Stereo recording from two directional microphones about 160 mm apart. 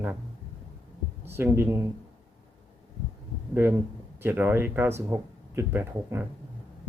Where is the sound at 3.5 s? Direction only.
15° right (ahead or behind).